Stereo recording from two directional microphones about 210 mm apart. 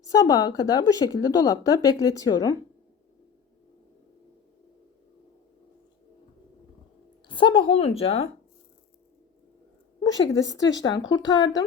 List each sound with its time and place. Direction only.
0.0 s speech: 15° left (ahead or behind)
7.3 s speech: 25° left (ahead or behind)
10.2 s speech: 15° left (ahead or behind)